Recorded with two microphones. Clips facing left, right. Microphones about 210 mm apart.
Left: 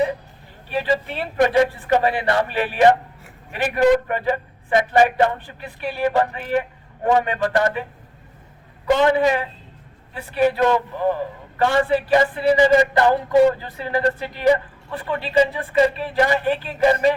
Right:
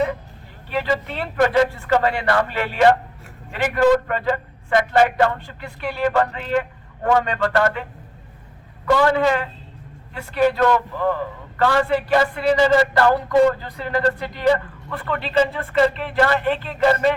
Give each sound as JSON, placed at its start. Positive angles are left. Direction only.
{"t": 0.7, "sound": "a man's voice", "side_deg": 15}
{"t": 8.9, "sound": "a man's voice", "side_deg": 20}